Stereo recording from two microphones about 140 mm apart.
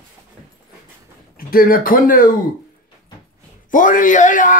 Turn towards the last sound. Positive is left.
turn(degrees=65)  # may be behind; listen again after turning